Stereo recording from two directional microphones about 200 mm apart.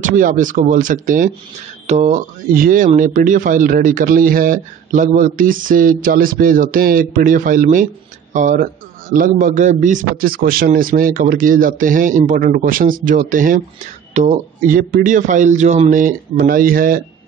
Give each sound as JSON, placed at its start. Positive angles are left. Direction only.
{"t": 0.0, "sound": "a man's voice", "side_deg": -40}